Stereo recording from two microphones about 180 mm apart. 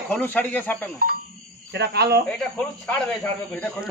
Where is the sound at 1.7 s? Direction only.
65° right (ahead or behind).